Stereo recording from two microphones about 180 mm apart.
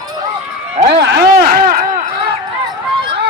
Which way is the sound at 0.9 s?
65° right (ahead or behind).